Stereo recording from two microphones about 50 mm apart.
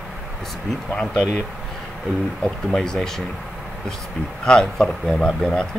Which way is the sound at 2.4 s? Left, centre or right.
Centre.